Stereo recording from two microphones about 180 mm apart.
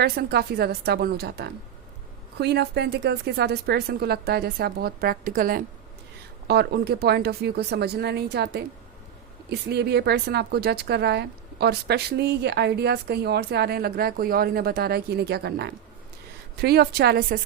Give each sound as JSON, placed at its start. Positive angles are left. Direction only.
{"t": 0.0, "sound": "a woman's voice", "side_deg": -65}
{"t": 6.5, "sound": "a woman's voice", "side_deg": -65}